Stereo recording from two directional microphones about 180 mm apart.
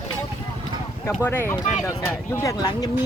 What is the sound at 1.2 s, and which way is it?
Speech, 10° left (ahead or behind).